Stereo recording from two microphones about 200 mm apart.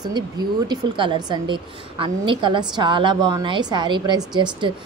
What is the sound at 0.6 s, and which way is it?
A woman's voice, 25° right (ahead or behind).